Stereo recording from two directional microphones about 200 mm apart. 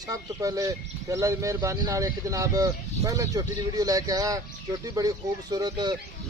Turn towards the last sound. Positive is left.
turn(degrees=-20)  # may be behind; listen again after turning